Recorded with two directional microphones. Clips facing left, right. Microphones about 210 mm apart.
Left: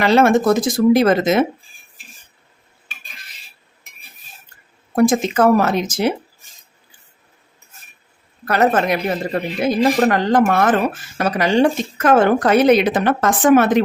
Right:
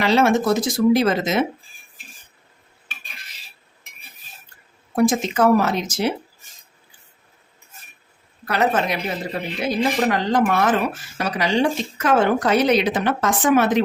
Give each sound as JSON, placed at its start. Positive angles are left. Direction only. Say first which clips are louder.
{"t": 0.0, "sound": "speech", "louder": "left 4 dB", "side_deg": 55}
{"t": 4.9, "sound": "speech", "louder": "left 3 dB", "side_deg": 50}
{"t": 8.4, "sound": "speech", "louder": "left 4 dB", "side_deg": 50}